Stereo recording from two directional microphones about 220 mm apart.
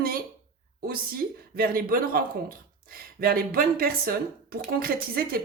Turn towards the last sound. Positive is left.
turn(degrees=-45)  # may be behind; listen again after turning